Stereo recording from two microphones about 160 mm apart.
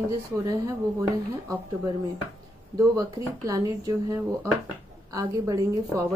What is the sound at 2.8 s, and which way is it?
Speech, 20° right (ahead or behind).